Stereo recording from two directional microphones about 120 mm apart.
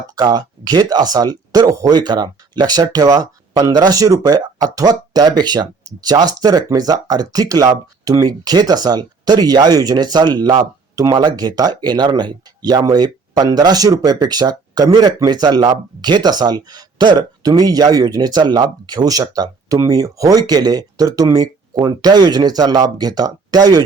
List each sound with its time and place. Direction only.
0.2 s speech: 35° right (ahead or behind)